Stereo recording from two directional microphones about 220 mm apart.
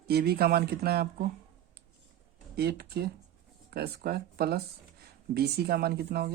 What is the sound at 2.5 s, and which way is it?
Speech, 45° right (ahead or behind).